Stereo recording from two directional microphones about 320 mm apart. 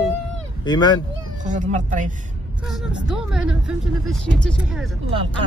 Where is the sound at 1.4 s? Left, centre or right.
Right.